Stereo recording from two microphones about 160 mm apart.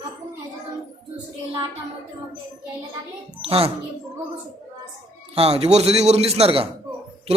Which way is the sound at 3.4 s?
35° right (ahead or behind).